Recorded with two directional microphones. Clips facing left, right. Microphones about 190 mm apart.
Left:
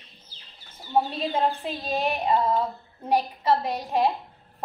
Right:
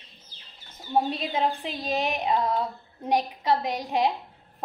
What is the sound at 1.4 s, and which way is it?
Speech, 10° right (ahead or behind).